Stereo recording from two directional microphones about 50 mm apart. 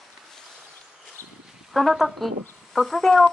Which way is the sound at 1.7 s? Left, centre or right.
Centre.